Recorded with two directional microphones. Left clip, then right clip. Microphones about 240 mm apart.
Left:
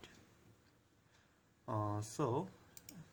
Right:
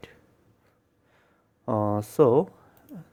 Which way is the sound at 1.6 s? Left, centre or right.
Right.